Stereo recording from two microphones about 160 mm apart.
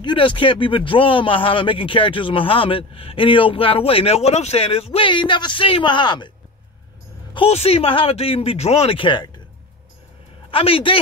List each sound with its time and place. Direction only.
0.0 s speech: 30° left (ahead or behind)
7.3 s speech: 40° left (ahead or behind)
10.5 s speech: 35° left (ahead or behind)